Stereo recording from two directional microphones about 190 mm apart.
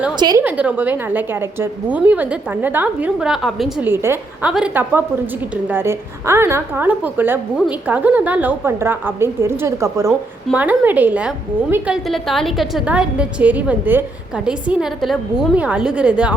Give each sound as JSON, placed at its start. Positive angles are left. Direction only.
{"t": 0.2, "sound": "a woman's voice", "side_deg": -20}
{"t": 0.4, "sound": "a woman's voice", "side_deg": -5}